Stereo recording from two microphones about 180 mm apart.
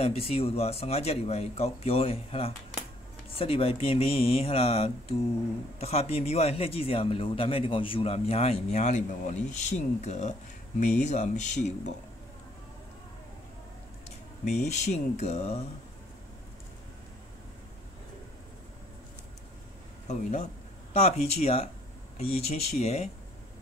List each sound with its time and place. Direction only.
0.0 s a man's voice: 35° left (ahead or behind)
14.4 s a man's voice: 40° left (ahead or behind)
20.1 s a man's voice: 40° left (ahead or behind)